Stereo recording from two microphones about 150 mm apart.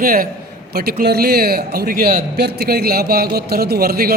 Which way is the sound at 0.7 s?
90° right.